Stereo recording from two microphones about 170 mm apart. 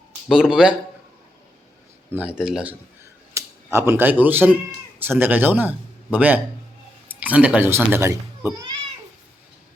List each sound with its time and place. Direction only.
0.3 s speech: 5° right (ahead or behind)
2.1 s speech: 5° right (ahead or behind)
3.3 s a man's voice: 15° right (ahead or behind)